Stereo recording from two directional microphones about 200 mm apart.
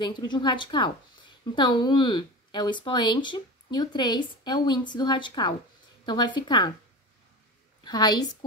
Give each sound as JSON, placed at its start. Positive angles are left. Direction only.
{"t": 0.0, "sound": "a woman's voice", "side_deg": 20}
{"t": 7.8, "sound": "a woman's voice", "side_deg": 20}